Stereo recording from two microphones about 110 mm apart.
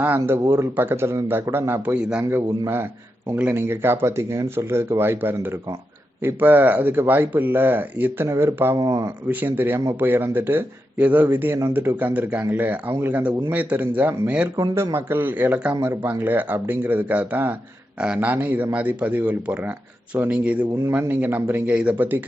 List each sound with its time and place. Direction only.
0.0 s speech: 20° right (ahead or behind)
2.2 s a man's voice: 20° right (ahead or behind)
8.7 s speech: 35° right (ahead or behind)
9.3 s a man's voice: 15° right (ahead or behind)
14.5 s speech: 35° right (ahead or behind)
14.9 s a man's voice: 20° right (ahead or behind)
15.7 s a man's voice: 25° right (ahead or behind)